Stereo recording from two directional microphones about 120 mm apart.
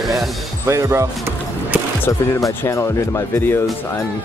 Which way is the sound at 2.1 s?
25° left (ahead or behind).